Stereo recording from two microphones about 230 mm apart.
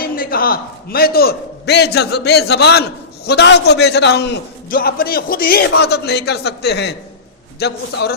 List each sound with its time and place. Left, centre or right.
0.0 s a man's voice: left